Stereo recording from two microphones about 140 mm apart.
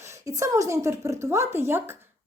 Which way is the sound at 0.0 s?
20° right (ahead or behind).